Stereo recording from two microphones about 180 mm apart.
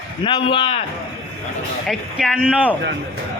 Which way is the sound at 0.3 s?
30° left (ahead or behind).